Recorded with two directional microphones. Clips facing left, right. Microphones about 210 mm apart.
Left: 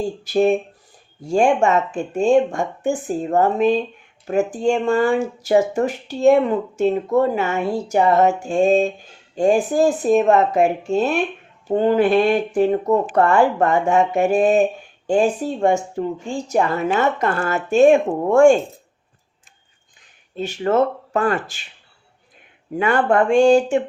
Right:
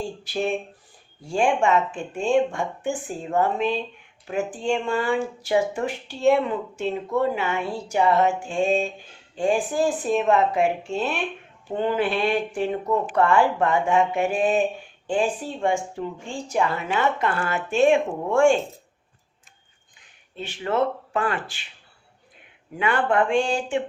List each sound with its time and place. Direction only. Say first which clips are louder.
0.3 s speech: left 10 dB; 45° left (ahead or behind)
20.3 s speech: left 7 dB; 40° left (ahead or behind)
22.8 s speech: left 5 dB; 45° left (ahead or behind)